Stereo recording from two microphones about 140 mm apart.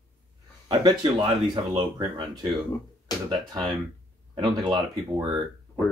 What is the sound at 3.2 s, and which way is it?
Speech, 5° left (ahead or behind).